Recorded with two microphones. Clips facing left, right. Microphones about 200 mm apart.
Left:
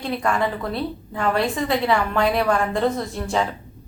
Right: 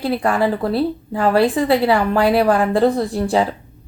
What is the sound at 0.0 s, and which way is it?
A woman's voice, 35° right (ahead or behind).